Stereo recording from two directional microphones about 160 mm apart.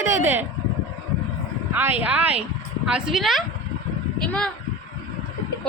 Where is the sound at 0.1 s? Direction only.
15° right (ahead or behind).